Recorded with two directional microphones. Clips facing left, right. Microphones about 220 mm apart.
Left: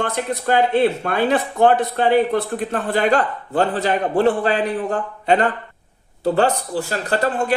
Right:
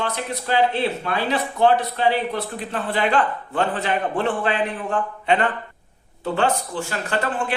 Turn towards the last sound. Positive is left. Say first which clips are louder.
# left 4 dB
turn(degrees=40)  # may be behind; listen again after turning